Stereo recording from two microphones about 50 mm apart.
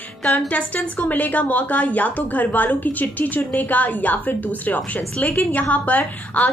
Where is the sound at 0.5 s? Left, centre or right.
Left.